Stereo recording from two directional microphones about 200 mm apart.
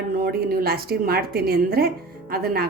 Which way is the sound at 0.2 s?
50° right (ahead or behind).